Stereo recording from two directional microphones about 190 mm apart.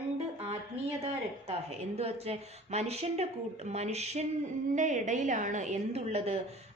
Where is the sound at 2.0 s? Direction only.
30° right (ahead or behind).